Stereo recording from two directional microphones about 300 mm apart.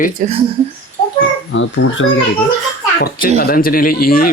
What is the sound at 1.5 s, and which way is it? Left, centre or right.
Speech, left.